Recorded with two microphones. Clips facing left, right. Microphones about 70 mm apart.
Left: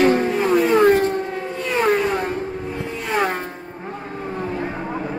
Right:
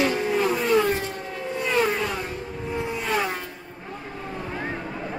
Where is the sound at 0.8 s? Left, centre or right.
Left.